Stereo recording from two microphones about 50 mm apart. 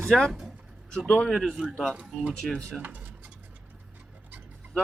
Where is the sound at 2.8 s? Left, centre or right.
Right.